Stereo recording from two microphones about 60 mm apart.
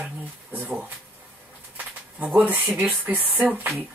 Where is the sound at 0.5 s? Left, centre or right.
Right.